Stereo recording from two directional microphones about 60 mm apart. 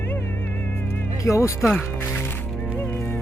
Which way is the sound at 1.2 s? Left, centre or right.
Left.